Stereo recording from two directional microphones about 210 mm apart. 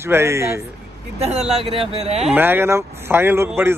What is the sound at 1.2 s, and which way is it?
A man's voice, 30° right (ahead or behind).